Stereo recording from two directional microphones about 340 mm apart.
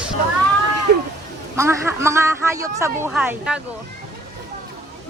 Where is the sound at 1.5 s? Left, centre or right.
Centre.